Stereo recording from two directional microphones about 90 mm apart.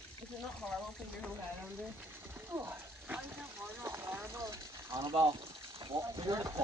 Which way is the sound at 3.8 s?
25° right (ahead or behind).